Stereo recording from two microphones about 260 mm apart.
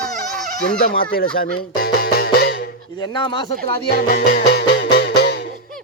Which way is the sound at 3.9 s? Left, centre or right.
Left.